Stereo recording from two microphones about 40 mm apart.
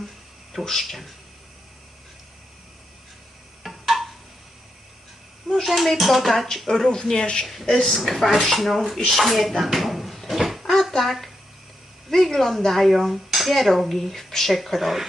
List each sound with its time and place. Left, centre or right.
0.6 s speech: centre
3.6 s a sound: centre
5.5 s speech: centre
7.4 s speech: centre
9.0 s a sound: centre
11.0 s speech: centre